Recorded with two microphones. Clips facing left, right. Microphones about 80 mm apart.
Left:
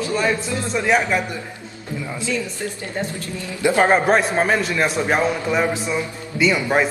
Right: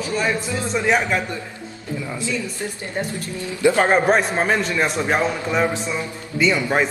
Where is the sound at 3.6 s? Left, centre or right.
Left.